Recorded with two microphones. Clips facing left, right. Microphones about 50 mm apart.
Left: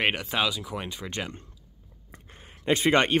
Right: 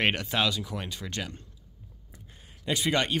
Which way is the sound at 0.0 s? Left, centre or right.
Centre.